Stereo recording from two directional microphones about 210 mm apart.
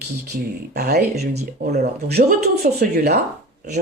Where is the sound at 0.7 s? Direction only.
50° right (ahead or behind).